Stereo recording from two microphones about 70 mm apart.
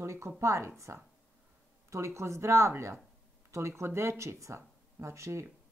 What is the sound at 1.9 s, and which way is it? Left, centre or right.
Speech, right.